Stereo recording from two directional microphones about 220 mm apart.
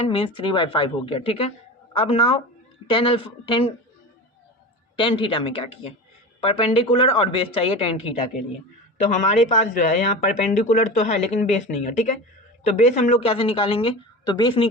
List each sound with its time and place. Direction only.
0.1 s a woman's voice: 25° left (ahead or behind)
4.9 s a woman's voice: 20° left (ahead or behind)
9.0 s a woman's voice: 30° left (ahead or behind)